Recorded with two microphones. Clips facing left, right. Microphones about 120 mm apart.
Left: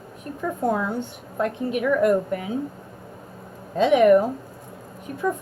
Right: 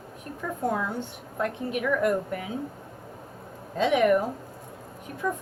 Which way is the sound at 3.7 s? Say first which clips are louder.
Left 6 dB; 25° left (ahead or behind).